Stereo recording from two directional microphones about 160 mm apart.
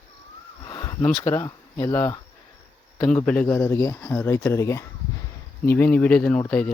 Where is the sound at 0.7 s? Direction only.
25° left (ahead or behind).